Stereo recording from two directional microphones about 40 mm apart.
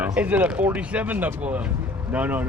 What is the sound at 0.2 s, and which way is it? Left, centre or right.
Speech, right.